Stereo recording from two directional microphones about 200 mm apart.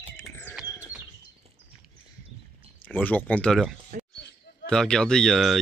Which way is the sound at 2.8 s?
10° left (ahead or behind).